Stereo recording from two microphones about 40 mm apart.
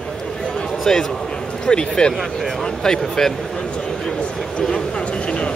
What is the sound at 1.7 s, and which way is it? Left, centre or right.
Speech, left.